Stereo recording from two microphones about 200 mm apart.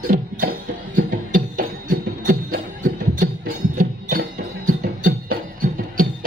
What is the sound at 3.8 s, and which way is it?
Music, 45° right (ahead or behind).